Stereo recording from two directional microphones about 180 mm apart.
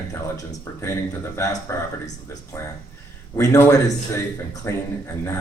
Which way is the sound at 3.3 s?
15° left (ahead or behind).